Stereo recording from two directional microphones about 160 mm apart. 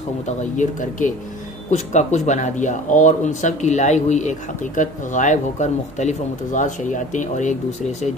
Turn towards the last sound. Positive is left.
turn(degrees=50)  # may be behind; listen again after turning